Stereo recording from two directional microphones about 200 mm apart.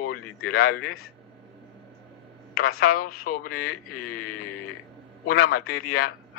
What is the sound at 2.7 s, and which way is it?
Speech, 90° left.